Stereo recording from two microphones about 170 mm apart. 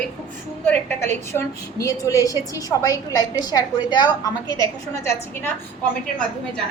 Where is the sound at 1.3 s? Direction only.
20° left (ahead or behind).